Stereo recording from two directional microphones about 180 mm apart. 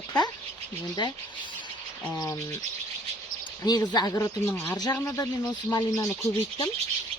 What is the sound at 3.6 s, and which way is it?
Speech, 20° left (ahead or behind).